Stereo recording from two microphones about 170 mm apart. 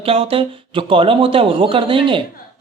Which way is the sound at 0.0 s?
35° right (ahead or behind).